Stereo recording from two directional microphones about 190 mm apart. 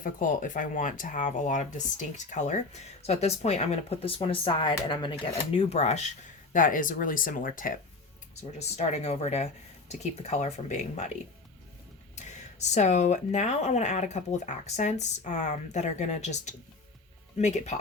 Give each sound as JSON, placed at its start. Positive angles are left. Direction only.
{"t": 0.0, "sound": "speech", "side_deg": 45}
{"t": 12.1, "sound": "speech", "side_deg": 35}